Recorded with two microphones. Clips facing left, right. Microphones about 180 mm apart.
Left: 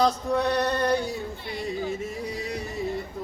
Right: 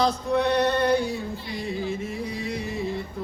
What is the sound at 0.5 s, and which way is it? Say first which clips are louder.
Male singing: right 3 dB; 40° left (ahead or behind).